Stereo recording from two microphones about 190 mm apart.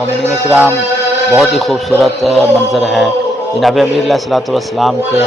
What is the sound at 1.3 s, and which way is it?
A man's voice, centre (ahead or behind).